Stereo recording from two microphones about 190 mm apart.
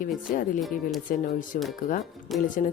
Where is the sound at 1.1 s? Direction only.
45° left (ahead or behind).